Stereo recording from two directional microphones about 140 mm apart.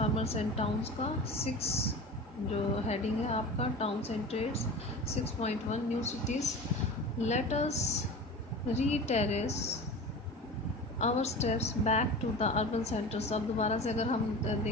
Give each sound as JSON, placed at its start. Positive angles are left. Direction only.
{"t": 0.0, "sound": "a woman's voice", "side_deg": 50}
{"t": 11.0, "sound": "a woman's voice", "side_deg": 50}